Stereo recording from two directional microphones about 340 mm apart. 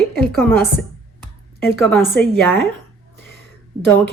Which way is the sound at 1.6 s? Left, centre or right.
Centre.